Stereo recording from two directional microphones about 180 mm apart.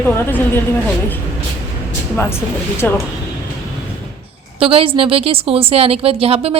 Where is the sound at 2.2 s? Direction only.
15° left (ahead or behind).